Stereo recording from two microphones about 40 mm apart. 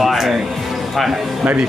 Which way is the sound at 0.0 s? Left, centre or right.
Centre.